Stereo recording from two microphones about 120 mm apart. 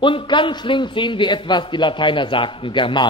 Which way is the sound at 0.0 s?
45° left (ahead or behind).